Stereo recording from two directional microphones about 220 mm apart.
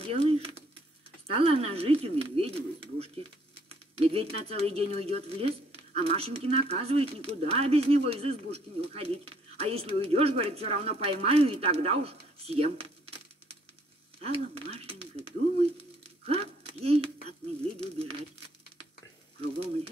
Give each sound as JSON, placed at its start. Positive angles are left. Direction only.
{"t": 0.0, "sound": "a sound", "side_deg": -25}
{"t": 1.3, "sound": "speech", "side_deg": -25}
{"t": 14.2, "sound": "speech", "side_deg": -25}